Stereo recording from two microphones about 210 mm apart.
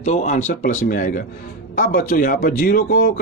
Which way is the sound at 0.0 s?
35° left (ahead or behind).